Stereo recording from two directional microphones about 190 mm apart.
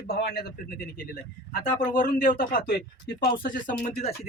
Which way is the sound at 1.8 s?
45° left (ahead or behind).